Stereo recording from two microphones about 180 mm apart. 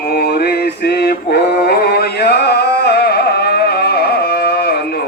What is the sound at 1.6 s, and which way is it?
Music, 60° left (ahead or behind).